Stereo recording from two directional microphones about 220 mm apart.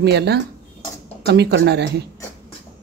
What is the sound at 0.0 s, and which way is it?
Speech, 50° right (ahead or behind).